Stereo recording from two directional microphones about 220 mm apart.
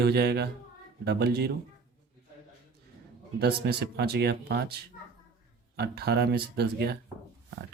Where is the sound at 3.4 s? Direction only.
50° right (ahead or behind).